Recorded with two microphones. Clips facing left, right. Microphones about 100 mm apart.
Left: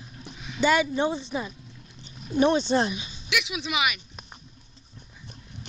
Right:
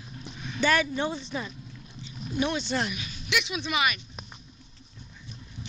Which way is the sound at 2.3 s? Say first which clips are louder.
Left 7 dB; 30° left (ahead or behind).